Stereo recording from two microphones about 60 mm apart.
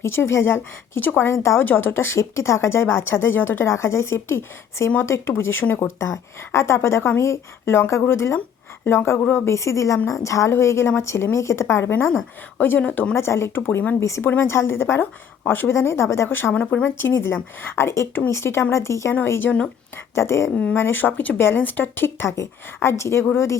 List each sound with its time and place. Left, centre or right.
0.0 s speech: left
1.6 s a woman's voice: left
2.1 s a woman's voice: left
6.5 s a woman's voice: left
9.3 s a woman's voice: left
10.5 s speech: left
13.1 s a woman's voice: left
15.7 s speech: left
16.6 s speech: left
17.0 s speech: left
19.2 s a woman's voice: left
20.1 s speech: left
20.7 s a woman's voice: left